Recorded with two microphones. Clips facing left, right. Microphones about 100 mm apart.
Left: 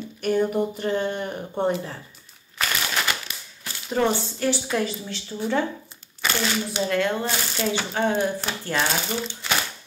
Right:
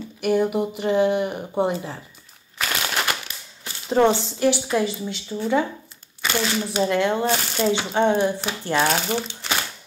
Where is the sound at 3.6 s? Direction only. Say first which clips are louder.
Right 5 dB; 30° right (ahead or behind).